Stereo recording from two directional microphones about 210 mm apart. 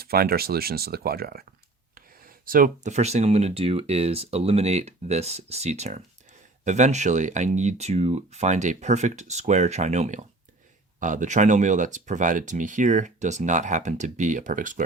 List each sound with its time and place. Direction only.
0.0 s speech: 45° right (ahead or behind)
2.5 s speech: 40° right (ahead or behind)